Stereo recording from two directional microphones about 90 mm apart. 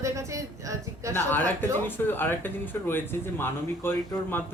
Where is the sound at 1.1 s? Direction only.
20° left (ahead or behind).